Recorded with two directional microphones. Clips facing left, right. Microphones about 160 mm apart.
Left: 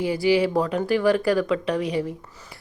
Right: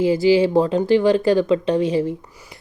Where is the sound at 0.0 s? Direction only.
25° right (ahead or behind).